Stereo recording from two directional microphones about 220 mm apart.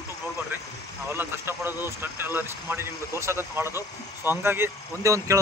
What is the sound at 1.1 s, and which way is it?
Speech, 10° right (ahead or behind).